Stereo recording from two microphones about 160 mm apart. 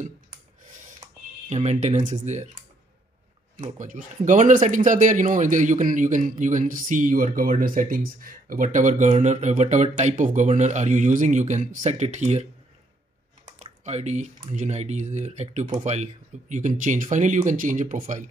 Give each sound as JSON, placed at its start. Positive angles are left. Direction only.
{"t": 1.5, "sound": "speech", "side_deg": -45}
{"t": 3.6, "sound": "speech", "side_deg": -55}
{"t": 13.8, "sound": "speech", "side_deg": -45}